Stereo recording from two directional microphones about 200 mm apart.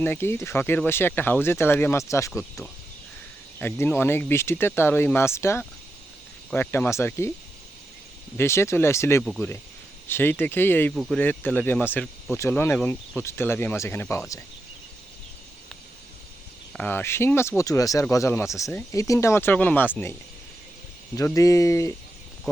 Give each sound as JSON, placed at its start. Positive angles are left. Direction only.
{"t": 0.0, "sound": "speech", "side_deg": 10}
{"t": 3.6, "sound": "speech", "side_deg": 10}
{"t": 8.4, "sound": "speech", "side_deg": 15}
{"t": 16.7, "sound": "speech", "side_deg": 10}
{"t": 21.2, "sound": "speech", "side_deg": 15}